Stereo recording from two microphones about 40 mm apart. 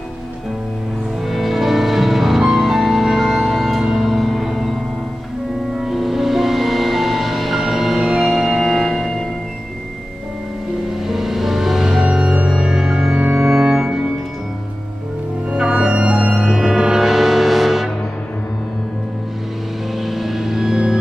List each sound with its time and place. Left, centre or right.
1.2 s music: centre
5.8 s music: centre
11.1 s music: centre
15.5 s music: centre
16.3 s music: centre
20.0 s music: centre